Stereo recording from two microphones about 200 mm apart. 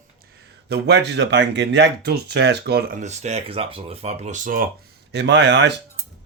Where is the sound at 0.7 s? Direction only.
55° right (ahead or behind).